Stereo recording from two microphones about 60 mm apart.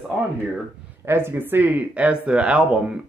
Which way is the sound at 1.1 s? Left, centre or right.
Right.